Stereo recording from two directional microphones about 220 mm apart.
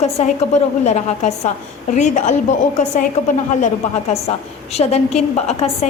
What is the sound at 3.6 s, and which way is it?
A woman's voice, 30° left (ahead or behind).